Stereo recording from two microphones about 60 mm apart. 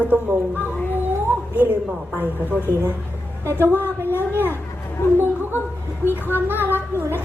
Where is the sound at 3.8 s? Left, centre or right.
Left.